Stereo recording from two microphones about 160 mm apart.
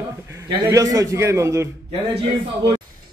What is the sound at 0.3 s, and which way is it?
A man's voice, 20° right (ahead or behind).